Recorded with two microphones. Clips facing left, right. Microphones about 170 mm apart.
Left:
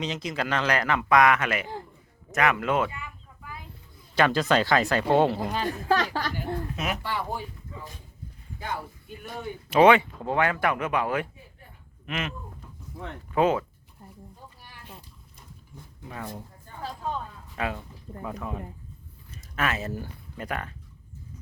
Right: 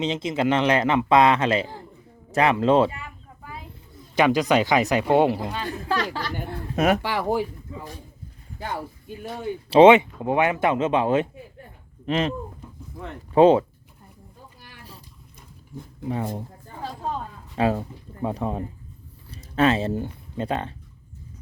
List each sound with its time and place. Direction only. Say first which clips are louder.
0.0 s speech: right 7 dB; 25° right (ahead or behind)
2.3 s a sound: right 6 dB; 30° right (ahead or behind)
4.1 s speech: right 3 dB; 15° right (ahead or behind)
5.9 s chatter: left 1 dB; 45° left (ahead or behind)
6.3 s a sound: right 3 dB; 55° right (ahead or behind)
7.0 s speech: right 8 dB; 90° right
9.6 s speech: right 5 dB; 25° right (ahead or behind)
13.3 s speech: right 8 dB; 30° right (ahead or behind)
16.0 s speech: right 9 dB; 25° right (ahead or behind)
17.5 s speech: right 9 dB; 35° right (ahead or behind)